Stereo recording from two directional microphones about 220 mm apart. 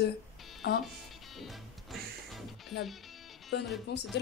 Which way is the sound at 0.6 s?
50° left (ahead or behind).